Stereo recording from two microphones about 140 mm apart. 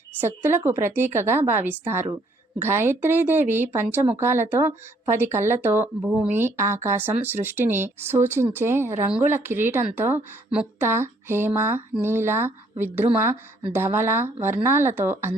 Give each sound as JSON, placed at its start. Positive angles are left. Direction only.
{"t": 0.2, "sound": "speech", "side_deg": -15}
{"t": 9.0, "sound": "speech", "side_deg": -5}